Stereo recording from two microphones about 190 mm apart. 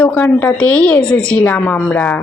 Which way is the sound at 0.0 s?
5° left (ahead or behind).